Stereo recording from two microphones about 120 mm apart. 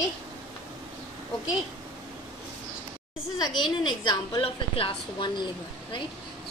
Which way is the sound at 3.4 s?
35° left (ahead or behind).